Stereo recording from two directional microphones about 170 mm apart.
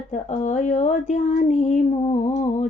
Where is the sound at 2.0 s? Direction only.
35° left (ahead or behind).